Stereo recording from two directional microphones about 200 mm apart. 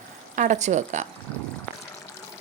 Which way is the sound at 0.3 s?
40° right (ahead or behind).